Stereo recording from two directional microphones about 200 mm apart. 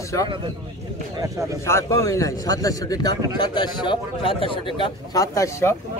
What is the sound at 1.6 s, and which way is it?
A man's voice, 15° left (ahead or behind).